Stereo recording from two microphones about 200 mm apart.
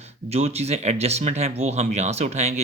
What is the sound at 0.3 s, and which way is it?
Speech, 30° right (ahead or behind).